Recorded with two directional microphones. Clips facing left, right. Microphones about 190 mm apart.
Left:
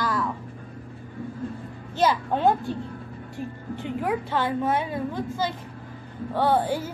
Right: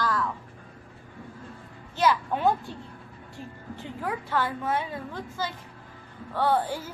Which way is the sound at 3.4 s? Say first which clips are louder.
Left 7 dB; 20° left (ahead or behind).